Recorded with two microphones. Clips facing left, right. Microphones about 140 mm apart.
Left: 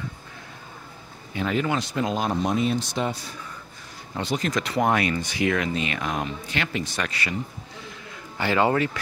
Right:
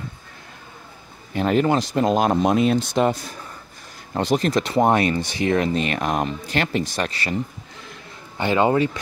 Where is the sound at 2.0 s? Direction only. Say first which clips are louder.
Right 8 dB; 65° right (ahead or behind); by 3.0 s 90° right.